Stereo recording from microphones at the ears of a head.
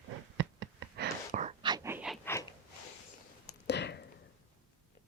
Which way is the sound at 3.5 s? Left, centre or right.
Left.